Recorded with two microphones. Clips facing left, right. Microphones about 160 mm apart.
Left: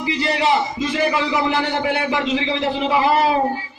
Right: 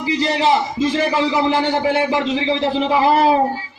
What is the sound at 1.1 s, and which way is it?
A man's voice, 30° right (ahead or behind).